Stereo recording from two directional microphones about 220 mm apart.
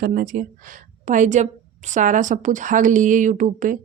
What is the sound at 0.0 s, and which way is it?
Speech, 40° right (ahead or behind).